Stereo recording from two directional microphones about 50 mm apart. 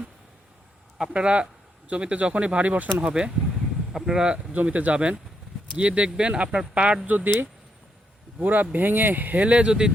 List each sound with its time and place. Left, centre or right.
0.9 s speech: centre
3.1 s speech: centre
4.5 s speech: right
8.4 s speech: right; by 9.9 s centre